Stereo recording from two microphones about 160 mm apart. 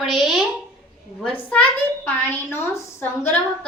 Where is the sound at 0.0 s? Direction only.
Centre (ahead or behind).